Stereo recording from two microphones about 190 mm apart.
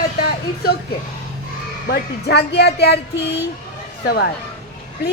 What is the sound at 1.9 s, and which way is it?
Speech, 60° left (ahead or behind).